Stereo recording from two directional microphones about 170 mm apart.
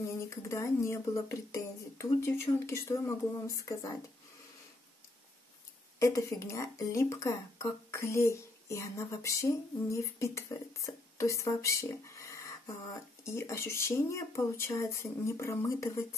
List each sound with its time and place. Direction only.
0.3 s speech: 20° left (ahead or behind)
5.9 s speech: 20° left (ahead or behind)